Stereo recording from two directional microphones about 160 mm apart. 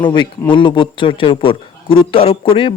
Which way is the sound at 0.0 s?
30° left (ahead or behind).